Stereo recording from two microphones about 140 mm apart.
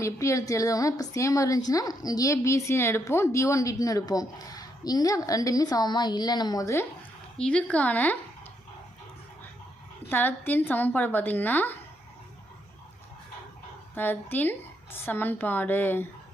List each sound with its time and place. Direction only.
0.0 s a woman's voice: 20° left (ahead or behind)
7.3 s a woman's voice: 5° left (ahead or behind)
10.1 s a woman's voice: 15° left (ahead or behind)
13.9 s a woman's voice: 15° left (ahead or behind)